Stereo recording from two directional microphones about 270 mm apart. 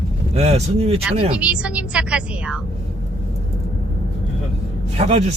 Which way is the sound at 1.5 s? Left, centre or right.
Centre.